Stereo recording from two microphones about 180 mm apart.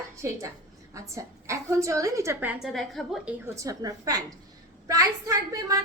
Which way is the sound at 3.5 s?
20° right (ahead or behind).